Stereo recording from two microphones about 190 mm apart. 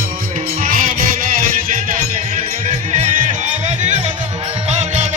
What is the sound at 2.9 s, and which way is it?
Music, 40° right (ahead or behind).